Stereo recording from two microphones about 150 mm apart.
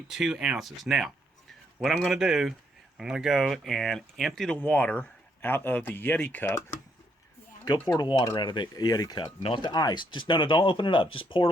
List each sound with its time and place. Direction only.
0.1 s speech: 5° right (ahead or behind); by 6.6 s 15° left (ahead or behind)
7.6 s speech: 25° left (ahead or behind)